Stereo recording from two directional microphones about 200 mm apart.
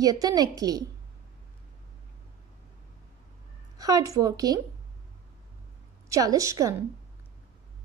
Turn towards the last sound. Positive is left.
turn(degrees=-15)  # may be behind; listen again after turning